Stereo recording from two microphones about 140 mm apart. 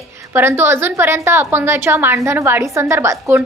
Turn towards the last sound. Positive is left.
turn(degrees=-15)  # may be behind; listen again after turning